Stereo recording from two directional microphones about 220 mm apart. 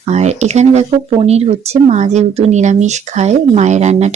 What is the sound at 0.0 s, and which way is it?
Speech, 30° right (ahead or behind).